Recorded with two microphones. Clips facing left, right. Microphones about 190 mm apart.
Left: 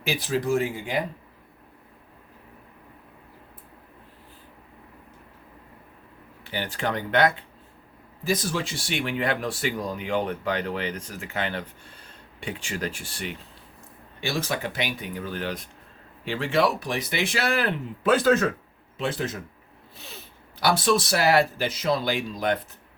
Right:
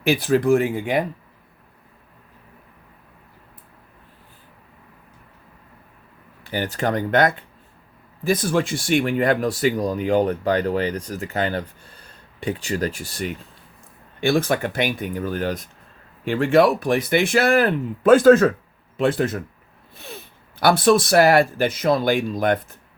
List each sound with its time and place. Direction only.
0.0 s speech: 55° right (ahead or behind)
6.4 s speech: 45° right (ahead or behind)
14.2 s speech: 55° right (ahead or behind)
20.6 s speech: 55° right (ahead or behind)